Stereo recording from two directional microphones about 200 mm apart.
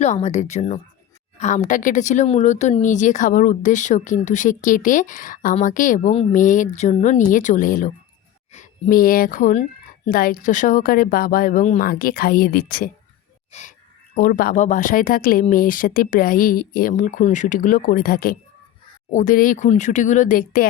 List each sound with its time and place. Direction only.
0.0 s a woman's voice: 35° left (ahead or behind)